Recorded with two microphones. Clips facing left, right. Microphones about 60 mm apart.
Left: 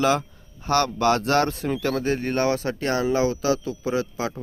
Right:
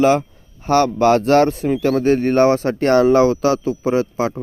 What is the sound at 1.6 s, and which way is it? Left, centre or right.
Speech, right.